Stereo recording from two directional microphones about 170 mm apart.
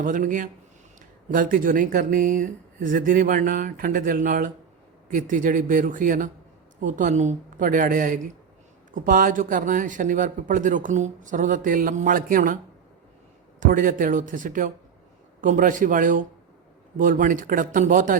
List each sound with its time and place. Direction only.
0.0 s a man's voice: 50° right (ahead or behind)
13.6 s a man's voice: 50° right (ahead or behind)